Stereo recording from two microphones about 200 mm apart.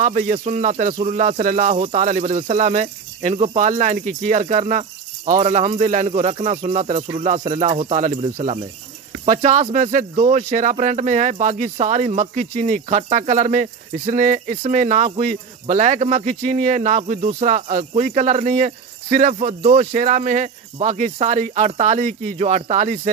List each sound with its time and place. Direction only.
0.0 s speech: 40° right (ahead or behind)
10.1 s speech: 25° right (ahead or behind)
10.5 s speech: 40° right (ahead or behind)